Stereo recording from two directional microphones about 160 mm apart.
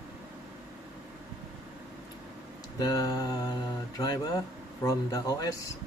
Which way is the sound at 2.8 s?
25° left (ahead or behind).